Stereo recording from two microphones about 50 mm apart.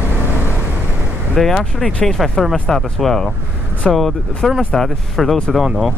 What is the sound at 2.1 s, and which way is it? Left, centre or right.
Speech, centre.